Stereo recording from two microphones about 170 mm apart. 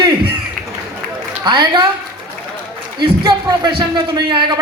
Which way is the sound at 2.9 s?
25° right (ahead or behind).